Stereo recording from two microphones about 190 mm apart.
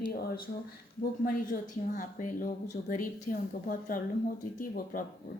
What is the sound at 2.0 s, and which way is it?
A woman's voice, 45° left (ahead or behind).